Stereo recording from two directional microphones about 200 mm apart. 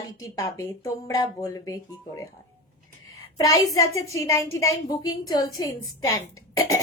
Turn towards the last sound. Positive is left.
turn(degrees=15)  # may be behind; listen again after turning